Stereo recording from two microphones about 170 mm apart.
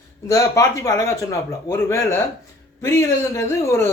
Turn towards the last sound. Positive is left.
turn(degrees=15)  # may be behind; listen again after turning